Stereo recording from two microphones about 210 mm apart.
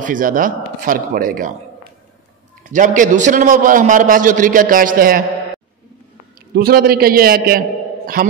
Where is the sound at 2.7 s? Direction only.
35° right (ahead or behind).